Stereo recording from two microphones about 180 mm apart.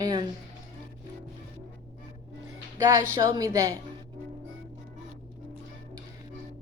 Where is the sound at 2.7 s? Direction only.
15° right (ahead or behind).